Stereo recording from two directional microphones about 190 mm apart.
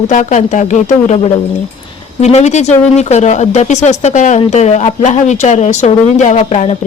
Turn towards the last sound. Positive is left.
turn(degrees=35)  # may be behind; listen again after turning